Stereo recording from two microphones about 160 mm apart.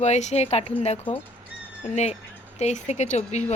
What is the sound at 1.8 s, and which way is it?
A woman's voice, 45° left (ahead or behind).